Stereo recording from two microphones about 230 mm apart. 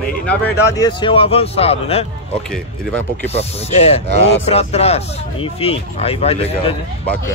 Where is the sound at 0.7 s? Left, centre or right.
Centre.